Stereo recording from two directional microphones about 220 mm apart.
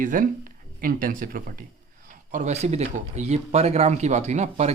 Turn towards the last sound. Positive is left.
turn(degrees=-30)  # may be behind; listen again after turning